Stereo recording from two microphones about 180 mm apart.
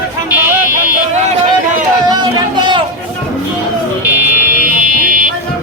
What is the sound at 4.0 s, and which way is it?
Buzzer, 10° right (ahead or behind).